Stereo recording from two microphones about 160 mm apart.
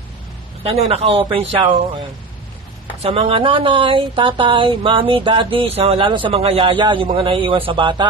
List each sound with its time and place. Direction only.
0.7 s speech: 40° right (ahead or behind)
3.0 s speech: 40° right (ahead or behind)